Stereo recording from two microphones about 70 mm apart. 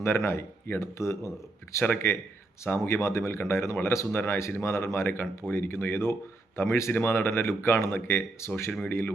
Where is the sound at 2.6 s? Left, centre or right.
Left.